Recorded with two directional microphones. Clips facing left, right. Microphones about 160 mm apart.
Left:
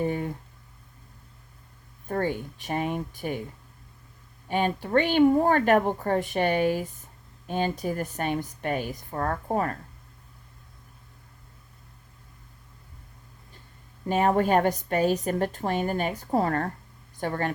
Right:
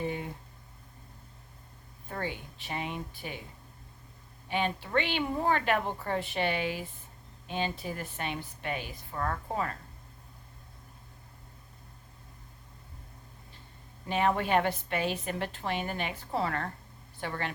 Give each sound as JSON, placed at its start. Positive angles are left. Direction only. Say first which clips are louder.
{"t": 2.0, "sound": "a woman's voice", "louder": "left 9 dB", "side_deg": 45}
{"t": 4.4, "sound": "a woman's voice", "louder": "left 5 dB", "side_deg": 45}
{"t": 14.1, "sound": "a woman's voice", "louder": "left 5 dB", "side_deg": 45}